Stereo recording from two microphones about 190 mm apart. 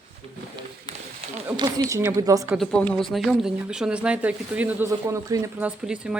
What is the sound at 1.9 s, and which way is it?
Speech, 15° right (ahead or behind).